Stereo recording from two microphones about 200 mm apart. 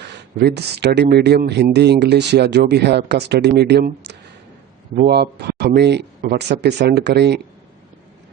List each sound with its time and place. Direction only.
0.0 s speech: 60° right (ahead or behind)